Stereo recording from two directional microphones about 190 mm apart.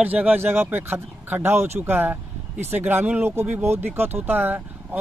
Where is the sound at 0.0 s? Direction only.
10° right (ahead or behind).